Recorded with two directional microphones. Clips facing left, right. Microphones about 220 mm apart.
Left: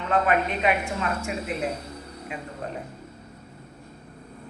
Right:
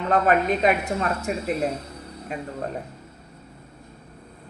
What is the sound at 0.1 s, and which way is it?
Speech, 40° right (ahead or behind).